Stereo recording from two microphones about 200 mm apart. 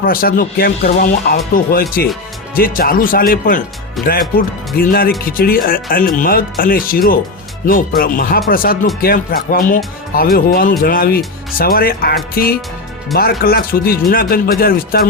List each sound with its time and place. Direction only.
0.0 s speech: 45° left (ahead or behind)
4.0 s speech: centre (ahead or behind)
4.4 s speech: 45° left (ahead or behind)